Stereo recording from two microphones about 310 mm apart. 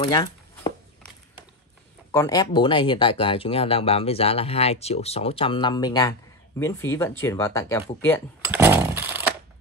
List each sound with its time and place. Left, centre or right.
0.0 s a sound: centre
2.1 s speech: centre
8.5 s chainsaw: centre